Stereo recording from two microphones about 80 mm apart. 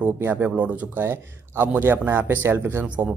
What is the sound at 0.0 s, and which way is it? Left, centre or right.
Speech, right.